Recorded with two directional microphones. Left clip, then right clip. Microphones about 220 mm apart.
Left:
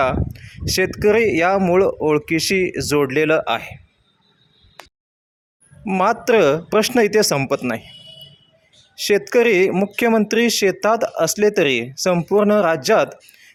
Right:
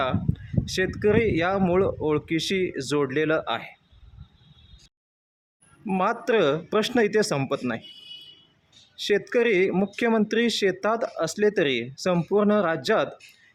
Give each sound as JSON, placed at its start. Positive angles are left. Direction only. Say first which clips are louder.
{"t": 0.6, "sound": "speech", "louder": "left 7 dB", "side_deg": 20}
{"t": 5.8, "sound": "speech", "louder": "left 7 dB", "side_deg": 15}
{"t": 9.0, "sound": "speech", "louder": "left 7 dB", "side_deg": 15}